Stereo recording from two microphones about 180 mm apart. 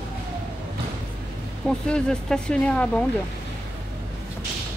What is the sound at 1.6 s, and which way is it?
Speech, 5° left (ahead or behind).